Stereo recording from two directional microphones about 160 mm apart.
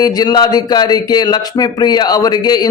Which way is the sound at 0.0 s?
25° left (ahead or behind).